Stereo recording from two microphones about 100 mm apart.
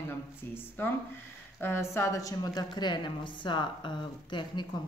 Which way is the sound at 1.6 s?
25° left (ahead or behind).